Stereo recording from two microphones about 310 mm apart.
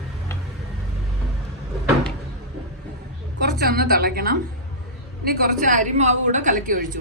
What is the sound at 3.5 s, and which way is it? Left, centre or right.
A woman's voice, right.